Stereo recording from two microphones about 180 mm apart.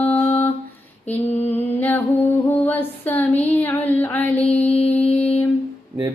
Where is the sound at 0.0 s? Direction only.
10° left (ahead or behind).